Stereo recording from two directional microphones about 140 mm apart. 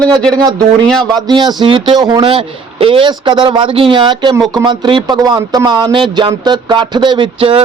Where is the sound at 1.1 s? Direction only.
30° right (ahead or behind).